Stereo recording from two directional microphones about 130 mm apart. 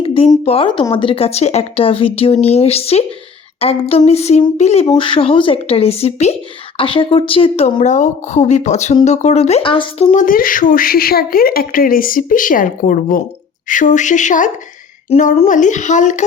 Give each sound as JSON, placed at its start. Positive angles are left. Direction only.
{"t": 0.0, "sound": "a sound", "side_deg": 45}
{"t": 0.4, "sound": "speech", "side_deg": 45}
{"t": 6.7, "sound": "speech", "side_deg": 45}
{"t": 9.6, "sound": "speech", "side_deg": 40}
{"t": 10.1, "sound": "speech", "side_deg": 80}
{"t": 15.1, "sound": "speech", "side_deg": 50}
{"t": 15.4, "sound": "speech", "side_deg": 75}